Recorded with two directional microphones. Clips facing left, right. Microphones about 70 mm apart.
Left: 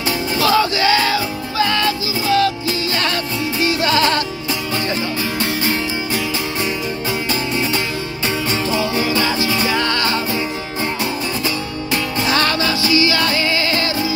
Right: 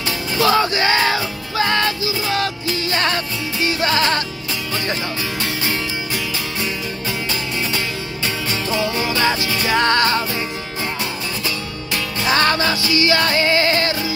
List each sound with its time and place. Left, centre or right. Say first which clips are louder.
0.4 s music: even; right
9.4 s music: left 4 dB; centre
9.7 s music: right 2 dB; right
12.3 s music: right 2 dB; right